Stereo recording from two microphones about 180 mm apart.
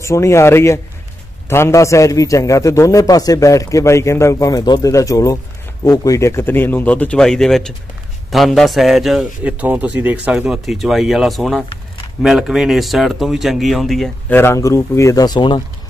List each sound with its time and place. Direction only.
0.0 s a man's voice: 15° left (ahead or behind)
14.3 s a man's voice: 15° left (ahead or behind)